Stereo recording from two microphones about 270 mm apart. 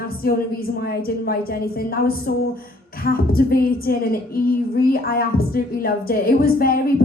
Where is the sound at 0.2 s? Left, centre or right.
Left.